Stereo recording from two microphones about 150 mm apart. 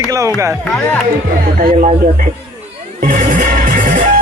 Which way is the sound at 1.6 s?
70° right (ahead or behind).